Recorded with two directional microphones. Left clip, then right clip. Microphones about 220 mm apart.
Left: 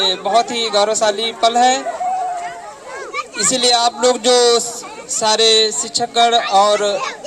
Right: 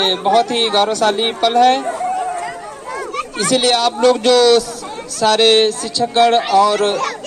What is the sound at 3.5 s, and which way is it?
A woman's voice, 15° left (ahead or behind).